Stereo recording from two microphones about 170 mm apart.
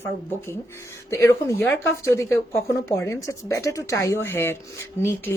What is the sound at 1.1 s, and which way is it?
A woman's voice, 15° left (ahead or behind).